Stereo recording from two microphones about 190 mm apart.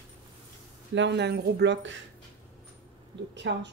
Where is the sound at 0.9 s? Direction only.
65° right (ahead or behind).